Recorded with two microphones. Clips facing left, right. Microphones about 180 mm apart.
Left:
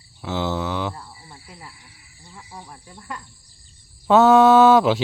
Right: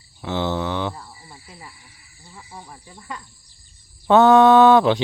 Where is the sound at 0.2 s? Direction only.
Centre (ahead or behind).